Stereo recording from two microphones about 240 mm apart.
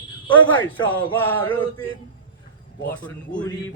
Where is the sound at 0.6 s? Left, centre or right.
Centre.